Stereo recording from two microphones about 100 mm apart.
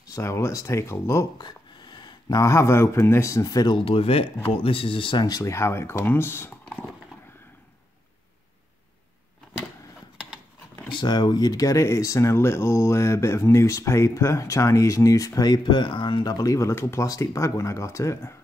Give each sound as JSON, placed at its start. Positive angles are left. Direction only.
{"t": 0.0, "sound": "speech", "side_deg": 30}
{"t": 1.4, "sound": "speech", "side_deg": 45}
{"t": 3.7, "sound": "speech", "side_deg": 65}
{"t": 5.2, "sound": "speech", "side_deg": 35}
{"t": 6.6, "sound": "horse", "side_deg": 15}
{"t": 10.9, "sound": "speech", "side_deg": 50}